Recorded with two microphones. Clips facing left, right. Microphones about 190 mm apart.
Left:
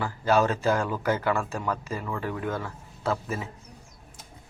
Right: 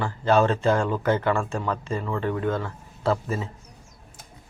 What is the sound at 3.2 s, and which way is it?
Speech, 30° right (ahead or behind).